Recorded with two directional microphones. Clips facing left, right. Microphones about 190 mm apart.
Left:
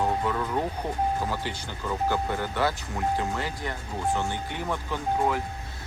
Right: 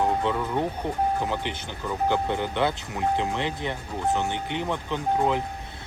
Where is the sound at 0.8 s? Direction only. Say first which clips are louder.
Right 2 dB; 15° right (ahead or behind).